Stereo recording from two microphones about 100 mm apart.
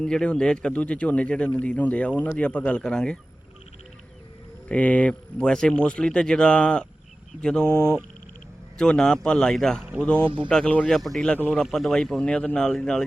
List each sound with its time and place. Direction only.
0.0 s speech: 10° left (ahead or behind)
4.7 s speech: 15° left (ahead or behind)
7.8 s speech: 25° right (ahead or behind)
8.8 s speech: 5° left (ahead or behind)
11.6 s speech: 5° left (ahead or behind)